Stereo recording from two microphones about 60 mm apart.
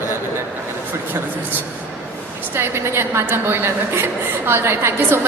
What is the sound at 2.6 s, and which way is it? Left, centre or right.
A woman's voice, right.